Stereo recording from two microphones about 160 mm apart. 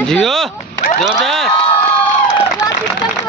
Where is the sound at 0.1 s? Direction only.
Centre (ahead or behind).